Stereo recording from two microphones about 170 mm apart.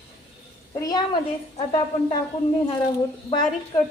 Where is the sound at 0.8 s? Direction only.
20° left (ahead or behind).